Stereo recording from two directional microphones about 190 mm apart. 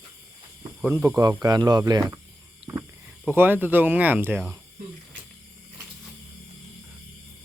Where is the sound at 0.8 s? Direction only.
10° right (ahead or behind).